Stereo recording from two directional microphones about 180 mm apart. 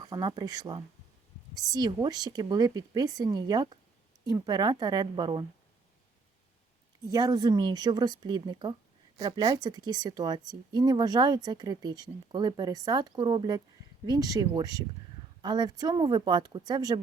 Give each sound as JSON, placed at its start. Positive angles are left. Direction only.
{"t": 0.0, "sound": "a woman's voice", "side_deg": -25}
{"t": 7.1, "sound": "a woman's voice", "side_deg": -20}